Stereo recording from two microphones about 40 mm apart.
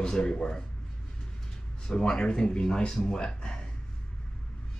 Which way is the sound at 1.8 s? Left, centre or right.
Centre.